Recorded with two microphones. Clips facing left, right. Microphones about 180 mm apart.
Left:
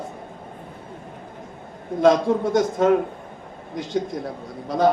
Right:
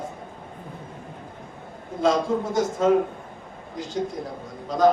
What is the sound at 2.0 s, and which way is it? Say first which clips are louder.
Speech: left 5 dB; 70° left (ahead or behind).